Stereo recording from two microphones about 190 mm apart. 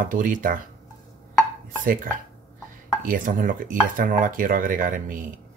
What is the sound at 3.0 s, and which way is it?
Speech, 45° right (ahead or behind).